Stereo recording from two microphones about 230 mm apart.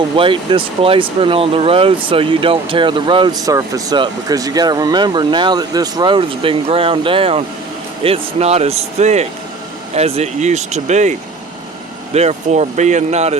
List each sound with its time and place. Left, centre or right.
0.2 s speech: right
12.1 s speech: right